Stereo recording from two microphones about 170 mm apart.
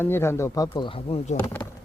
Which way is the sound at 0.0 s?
15° left (ahead or behind).